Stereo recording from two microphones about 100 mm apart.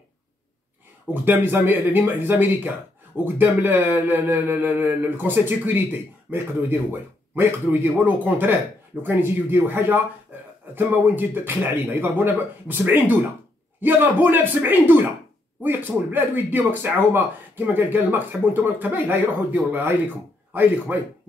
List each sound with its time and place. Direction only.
1.1 s speech: 20° right (ahead or behind)
10.3 s a sound: 15° right (ahead or behind)
10.7 s speech: 20° right (ahead or behind)
20.9 s speech: 15° right (ahead or behind)